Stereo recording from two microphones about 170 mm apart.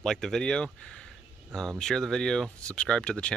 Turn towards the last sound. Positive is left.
turn(degrees=5)  # may be behind; listen again after turning